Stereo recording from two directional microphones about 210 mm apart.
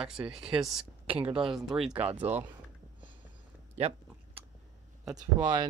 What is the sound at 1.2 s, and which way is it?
Speech, 25° right (ahead or behind).